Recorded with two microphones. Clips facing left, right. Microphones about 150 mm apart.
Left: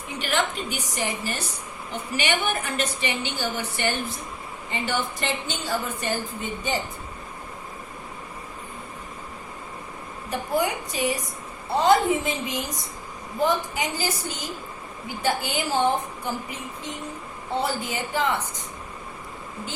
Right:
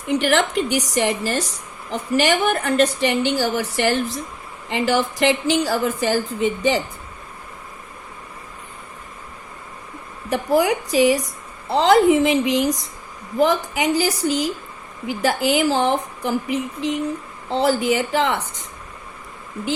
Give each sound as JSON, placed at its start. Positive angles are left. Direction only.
{"t": 0.1, "sound": "a woman's voice", "side_deg": -80}
{"t": 2.5, "sound": "a woman's voice", "side_deg": -70}
{"t": 10.2, "sound": "a woman's voice", "side_deg": -90}